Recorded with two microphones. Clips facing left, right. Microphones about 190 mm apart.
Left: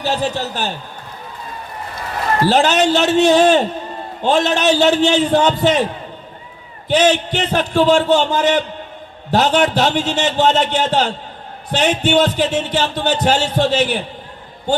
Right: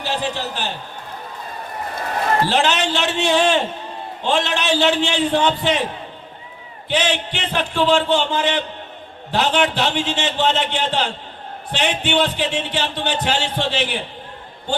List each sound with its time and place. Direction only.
0.0 s speech: 45° left (ahead or behind)
2.5 s a man's voice: 40° left (ahead or behind)
6.8 s a man's voice: 40° left (ahead or behind)